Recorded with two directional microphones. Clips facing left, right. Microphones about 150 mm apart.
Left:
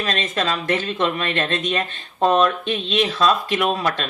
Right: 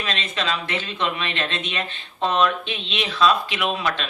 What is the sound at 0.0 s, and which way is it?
Speech, 45° left (ahead or behind).